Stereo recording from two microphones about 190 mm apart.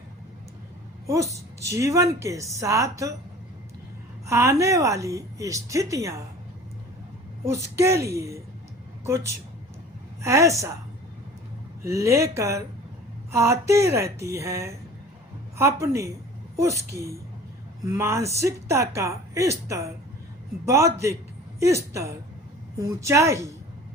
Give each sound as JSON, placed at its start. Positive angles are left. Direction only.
{"t": 1.0, "sound": "a woman's voice", "side_deg": -15}
{"t": 4.3, "sound": "a woman's voice", "side_deg": -15}
{"t": 7.4, "sound": "a woman's voice", "side_deg": -15}
{"t": 11.8, "sound": "a woman's voice", "side_deg": -15}